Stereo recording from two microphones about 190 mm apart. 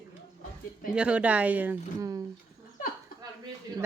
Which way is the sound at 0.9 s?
5° right (ahead or behind).